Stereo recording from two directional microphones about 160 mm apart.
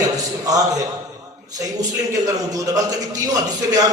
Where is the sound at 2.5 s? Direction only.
20° right (ahead or behind).